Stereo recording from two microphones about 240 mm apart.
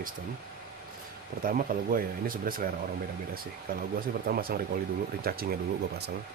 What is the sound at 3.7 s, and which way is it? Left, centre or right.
Speech, right.